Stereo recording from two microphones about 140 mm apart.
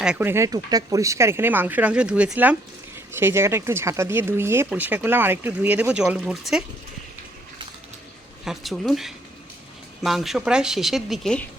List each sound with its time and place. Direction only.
0.0 s speech: 10° right (ahead or behind)
8.4 s a woman's voice: centre (ahead or behind)